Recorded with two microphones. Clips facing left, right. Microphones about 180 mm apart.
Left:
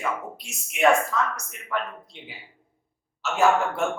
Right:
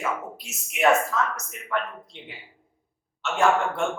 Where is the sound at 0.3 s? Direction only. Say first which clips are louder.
Left 1 dB; centre (ahead or behind).